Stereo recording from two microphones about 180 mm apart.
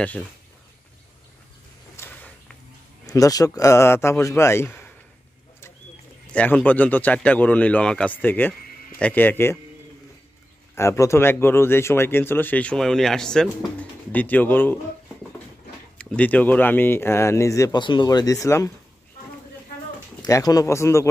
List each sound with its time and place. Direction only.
2.0 s a sound: 10° left (ahead or behind)
3.1 s a man's voice: 20° left (ahead or behind)
6.3 s a man's voice: 10° left (ahead or behind)
10.7 s a man's voice: 15° left (ahead or behind)
16.0 s a man's voice: 5° left (ahead or behind)
20.2 s a man's voice: 20° left (ahead or behind)